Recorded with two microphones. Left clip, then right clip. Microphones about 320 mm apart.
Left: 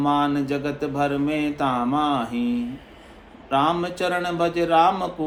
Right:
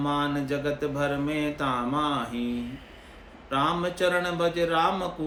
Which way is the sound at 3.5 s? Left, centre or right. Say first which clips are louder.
Left 5 dB; centre.